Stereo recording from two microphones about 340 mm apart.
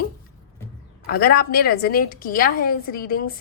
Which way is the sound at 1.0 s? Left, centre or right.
Left.